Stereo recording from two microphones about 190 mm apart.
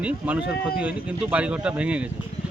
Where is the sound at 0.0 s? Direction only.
5° right (ahead or behind).